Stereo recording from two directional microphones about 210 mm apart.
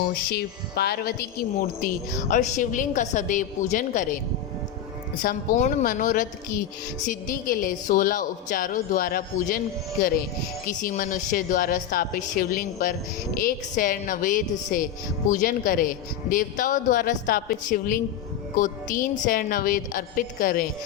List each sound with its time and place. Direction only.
0.3 s a woman's voice: 50° left (ahead or behind)
5.2 s a man's voice: 40° left (ahead or behind)
10.7 s a man's voice: 40° left (ahead or behind)